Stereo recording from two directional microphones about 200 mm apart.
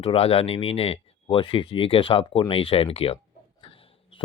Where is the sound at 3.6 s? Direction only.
25° left (ahead or behind).